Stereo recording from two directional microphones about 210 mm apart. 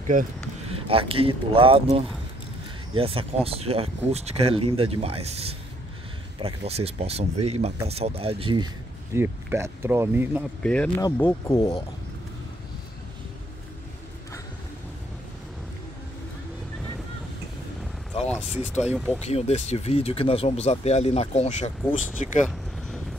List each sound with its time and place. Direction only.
0.0 s speech: 40° right (ahead or behind)
0.7 s speech: 25° right (ahead or behind)
9.1 s speech: 10° right (ahead or behind)
10.6 s speech: 5° left (ahead or behind)
18.3 s speech: 5° right (ahead or behind)
19.2 s speech: 30° left (ahead or behind)